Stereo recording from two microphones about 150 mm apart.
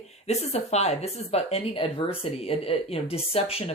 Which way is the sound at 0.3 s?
45° left (ahead or behind).